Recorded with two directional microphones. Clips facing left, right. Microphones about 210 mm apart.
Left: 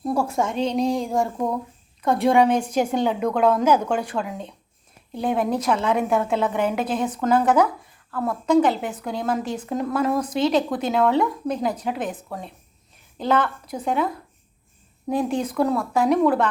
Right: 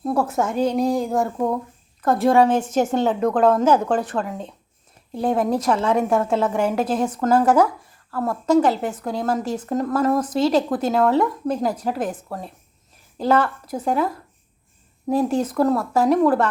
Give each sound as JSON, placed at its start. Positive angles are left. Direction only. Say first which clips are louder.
{"t": 0.0, "sound": "speech", "louder": "right 1 dB", "side_deg": 0}
{"t": 2.3, "sound": "a woman's voice", "louder": "right 1 dB", "side_deg": 10}
{"t": 3.3, "sound": "a woman's voice", "louder": "right 2 dB", "side_deg": -30}
{"t": 5.1, "sound": "a woman's voice", "louder": "right 2 dB", "side_deg": 0}
{"t": 15.3, "sound": "speech", "louder": "right 3 dB", "side_deg": -5}